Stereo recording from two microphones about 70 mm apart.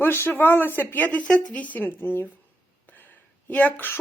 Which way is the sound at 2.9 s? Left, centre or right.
Left.